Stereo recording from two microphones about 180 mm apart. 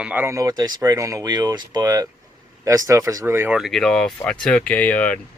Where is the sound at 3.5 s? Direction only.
Centre (ahead or behind).